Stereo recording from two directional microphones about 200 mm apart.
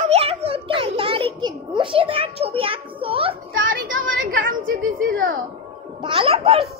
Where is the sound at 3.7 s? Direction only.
45° right (ahead or behind).